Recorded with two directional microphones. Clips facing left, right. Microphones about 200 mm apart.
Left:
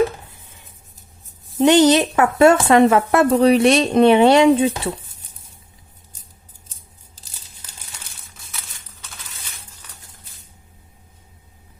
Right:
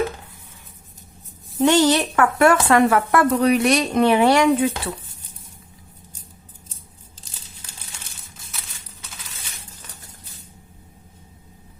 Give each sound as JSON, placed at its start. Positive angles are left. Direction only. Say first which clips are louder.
{"t": 1.5, "sound": "speech", "louder": "left 4 dB", "side_deg": 20}